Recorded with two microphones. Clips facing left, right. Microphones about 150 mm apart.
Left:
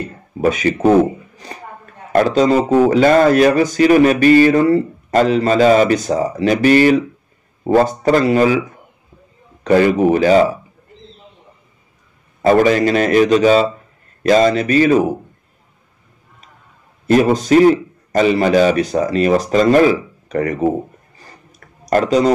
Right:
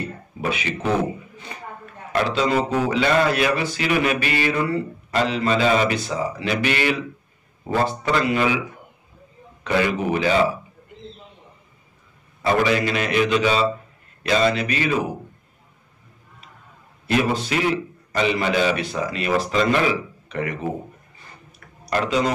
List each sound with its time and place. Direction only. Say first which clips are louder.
0.4 s a man's voice: left 11 dB; 40° left (ahead or behind)
9.6 s a man's voice: left 9 dB; 40° left (ahead or behind)
12.4 s speech: left 8 dB; 45° left (ahead or behind)
17.0 s a man's voice: left 8 dB; 40° left (ahead or behind)
21.2 s tick-tock: left 3 dB; 45° left (ahead or behind)